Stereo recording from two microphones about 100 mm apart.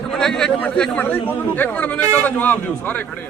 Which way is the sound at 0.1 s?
5° left (ahead or behind).